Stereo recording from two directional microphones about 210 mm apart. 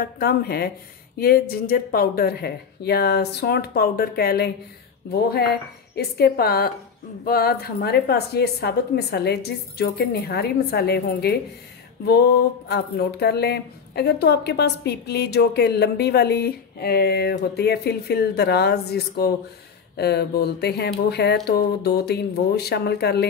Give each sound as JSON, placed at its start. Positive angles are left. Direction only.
{"t": 0.0, "sound": "speech", "side_deg": 45}
{"t": 5.9, "sound": "speech", "side_deg": 45}